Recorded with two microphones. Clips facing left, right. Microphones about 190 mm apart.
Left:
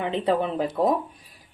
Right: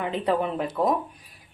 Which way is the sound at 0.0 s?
25° left (ahead or behind).